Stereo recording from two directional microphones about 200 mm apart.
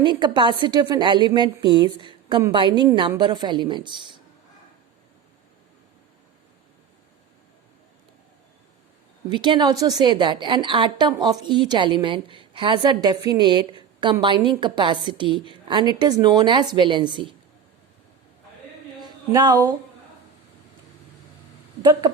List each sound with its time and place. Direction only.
0.0 s a woman's voice: 25° right (ahead or behind)
9.3 s a woman's voice: 20° right (ahead or behind)
18.9 s a sound: 20° right (ahead or behind)
21.8 s a woman's voice: 20° right (ahead or behind)